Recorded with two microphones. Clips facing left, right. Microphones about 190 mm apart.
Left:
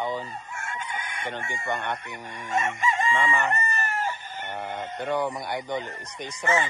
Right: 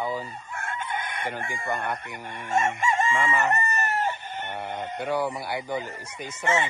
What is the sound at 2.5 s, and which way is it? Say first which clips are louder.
Chicken: right 2 dB; 50° right (ahead or behind).